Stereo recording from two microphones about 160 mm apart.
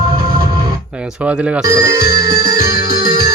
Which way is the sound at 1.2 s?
10° right (ahead or behind).